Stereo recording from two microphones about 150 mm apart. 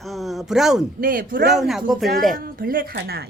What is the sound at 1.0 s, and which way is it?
Speech, 70° right (ahead or behind).